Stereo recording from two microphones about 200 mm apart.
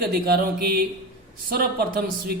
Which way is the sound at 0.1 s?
50° right (ahead or behind).